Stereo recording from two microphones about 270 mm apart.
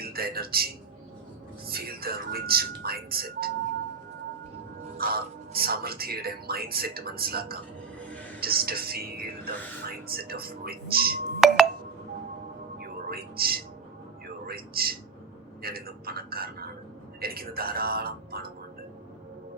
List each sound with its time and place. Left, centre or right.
0.0 s speech: right
4.9 s speech: right
11.3 s glass: centre
13.1 s whispering: right
14.4 s speech: right